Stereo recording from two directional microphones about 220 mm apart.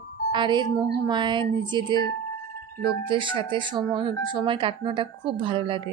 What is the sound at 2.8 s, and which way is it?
Speech, 25° right (ahead or behind).